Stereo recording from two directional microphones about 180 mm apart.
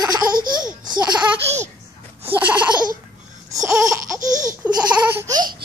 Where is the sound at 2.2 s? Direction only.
10° right (ahead or behind).